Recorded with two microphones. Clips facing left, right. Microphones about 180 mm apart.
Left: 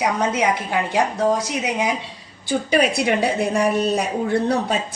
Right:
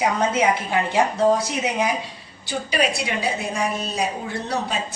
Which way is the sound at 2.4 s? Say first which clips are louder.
Left 5 dB; 55° left (ahead or behind).